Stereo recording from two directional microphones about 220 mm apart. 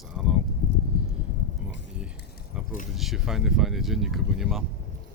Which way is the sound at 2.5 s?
5° right (ahead or behind).